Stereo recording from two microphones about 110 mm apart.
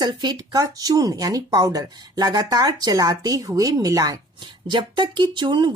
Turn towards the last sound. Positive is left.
turn(degrees=-45)  # may be behind; listen again after turning